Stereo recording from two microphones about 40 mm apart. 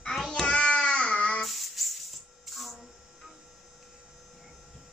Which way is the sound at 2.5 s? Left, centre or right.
Centre.